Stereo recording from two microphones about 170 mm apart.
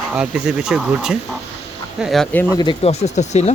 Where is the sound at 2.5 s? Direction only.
25° left (ahead or behind).